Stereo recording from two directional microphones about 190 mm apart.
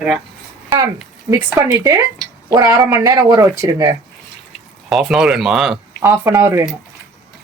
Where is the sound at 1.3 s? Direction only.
15° right (ahead or behind).